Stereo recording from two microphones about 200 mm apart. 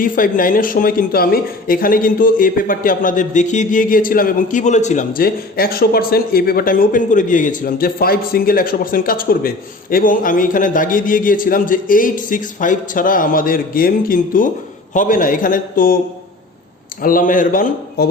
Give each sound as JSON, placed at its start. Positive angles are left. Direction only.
{"t": 0.0, "sound": "speech", "side_deg": 45}
{"t": 17.0, "sound": "speech", "side_deg": 45}